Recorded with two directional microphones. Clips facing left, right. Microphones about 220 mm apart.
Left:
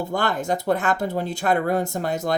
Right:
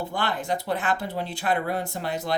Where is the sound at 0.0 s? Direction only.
45° left (ahead or behind).